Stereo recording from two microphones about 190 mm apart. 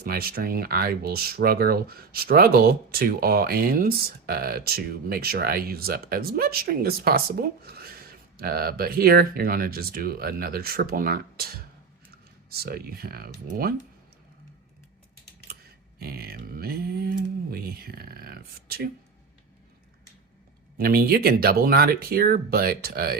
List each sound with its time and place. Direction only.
0.0 s speech: 50° right (ahead or behind)
16.0 s speech: 55° right (ahead or behind)
20.7 s speech: 50° right (ahead or behind)